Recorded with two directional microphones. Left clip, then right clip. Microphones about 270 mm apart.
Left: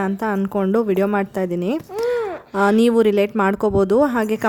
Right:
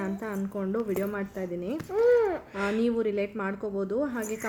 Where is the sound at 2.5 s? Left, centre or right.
Left.